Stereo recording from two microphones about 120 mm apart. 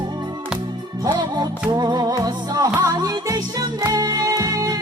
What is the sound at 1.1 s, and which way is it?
Music, 35° right (ahead or behind).